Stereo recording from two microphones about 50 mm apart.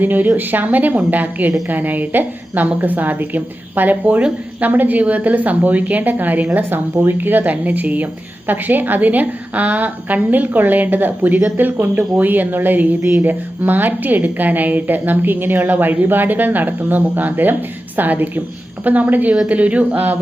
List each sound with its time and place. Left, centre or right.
0.0 s a woman's voice: right